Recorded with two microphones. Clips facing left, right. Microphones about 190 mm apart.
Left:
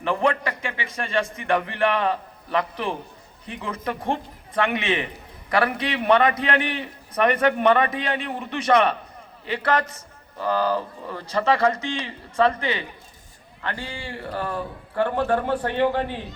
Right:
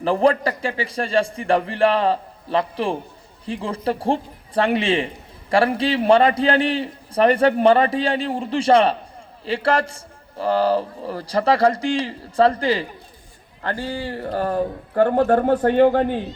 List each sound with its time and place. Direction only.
0.0 s speech: 35° right (ahead or behind)